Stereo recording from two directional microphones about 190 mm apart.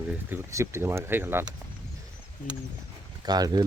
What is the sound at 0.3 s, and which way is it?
Speech, 15° right (ahead or behind).